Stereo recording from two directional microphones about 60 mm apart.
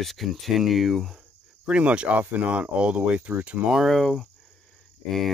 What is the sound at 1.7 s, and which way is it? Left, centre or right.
Speech, centre.